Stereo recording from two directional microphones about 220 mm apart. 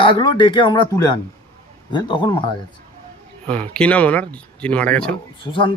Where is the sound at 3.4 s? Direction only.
5° left (ahead or behind).